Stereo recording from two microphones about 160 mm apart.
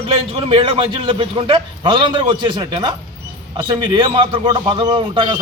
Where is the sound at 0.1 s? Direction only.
35° right (ahead or behind).